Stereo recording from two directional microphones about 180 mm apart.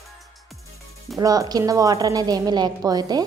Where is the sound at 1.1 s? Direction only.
20° right (ahead or behind).